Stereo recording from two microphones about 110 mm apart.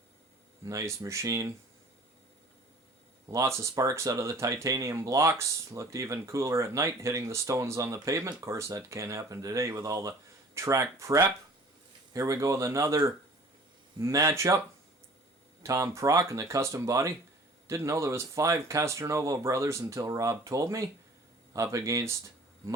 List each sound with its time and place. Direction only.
0.6 s speech: 30° right (ahead or behind)
3.2 s speech: 30° right (ahead or behind)
15.6 s speech: 30° right (ahead or behind)